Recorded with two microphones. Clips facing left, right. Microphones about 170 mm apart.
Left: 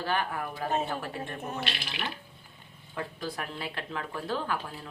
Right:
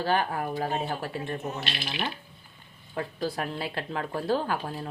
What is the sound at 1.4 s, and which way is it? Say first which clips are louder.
Speech: right 2 dB; 55° left (ahead or behind).